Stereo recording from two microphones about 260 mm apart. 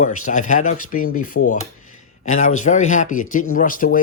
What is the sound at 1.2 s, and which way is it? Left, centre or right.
Dishes, left.